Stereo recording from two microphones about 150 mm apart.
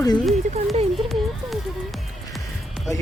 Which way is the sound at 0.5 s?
45° right (ahead or behind).